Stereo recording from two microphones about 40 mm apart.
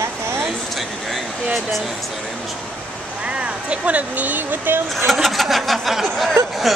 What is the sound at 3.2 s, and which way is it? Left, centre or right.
Speech, right.